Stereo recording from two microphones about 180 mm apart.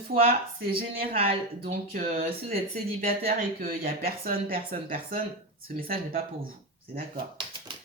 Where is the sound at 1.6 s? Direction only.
50° right (ahead or behind).